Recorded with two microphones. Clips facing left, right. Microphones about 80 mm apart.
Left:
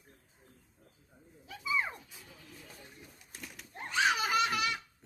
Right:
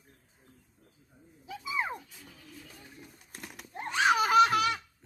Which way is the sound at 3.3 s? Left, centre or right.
Right.